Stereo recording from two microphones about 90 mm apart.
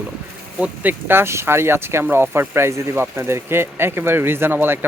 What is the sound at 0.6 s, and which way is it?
Speech, 20° right (ahead or behind).